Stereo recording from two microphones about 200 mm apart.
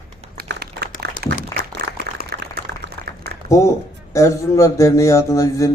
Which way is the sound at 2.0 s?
55° right (ahead or behind).